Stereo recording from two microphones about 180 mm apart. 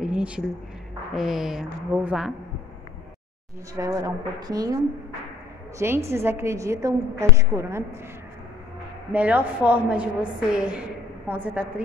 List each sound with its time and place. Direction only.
0.0 s a sound: 5° right (ahead or behind)
1.1 s a woman's voice: centre (ahead or behind)
3.7 s a woman's voice: 20° right (ahead or behind)
5.8 s a woman's voice: 15° right (ahead or behind)
9.1 s a woman's voice: 10° right (ahead or behind)